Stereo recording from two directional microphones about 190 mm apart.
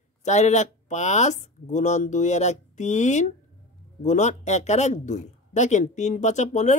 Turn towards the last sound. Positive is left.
turn(degrees=40)  # may be behind; listen again after turning